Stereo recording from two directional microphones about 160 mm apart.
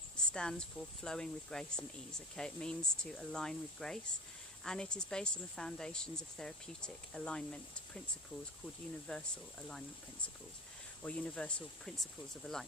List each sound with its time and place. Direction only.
0.3 s speech: 5° left (ahead or behind)
9.0 s speech: 5° left (ahead or behind)
11.0 s speech: 5° left (ahead or behind)